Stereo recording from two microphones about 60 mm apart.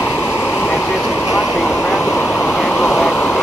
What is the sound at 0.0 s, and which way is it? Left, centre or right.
Vehicle, left.